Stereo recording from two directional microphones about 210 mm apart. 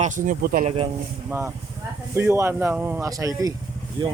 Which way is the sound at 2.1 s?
10° right (ahead or behind).